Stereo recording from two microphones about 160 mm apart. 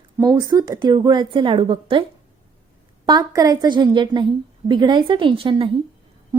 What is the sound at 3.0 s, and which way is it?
A woman's voice, 25° right (ahead or behind).